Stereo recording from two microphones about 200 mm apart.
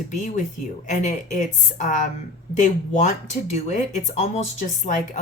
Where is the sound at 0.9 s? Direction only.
35° left (ahead or behind).